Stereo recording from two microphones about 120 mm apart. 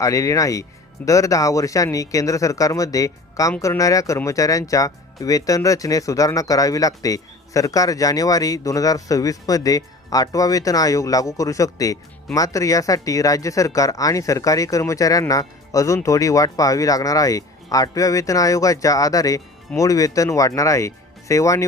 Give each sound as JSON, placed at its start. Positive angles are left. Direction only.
{"t": 0.0, "sound": "speech", "side_deg": 25}